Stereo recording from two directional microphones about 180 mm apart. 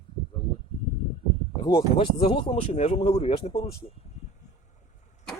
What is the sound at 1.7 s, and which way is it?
Speech, 30° left (ahead or behind).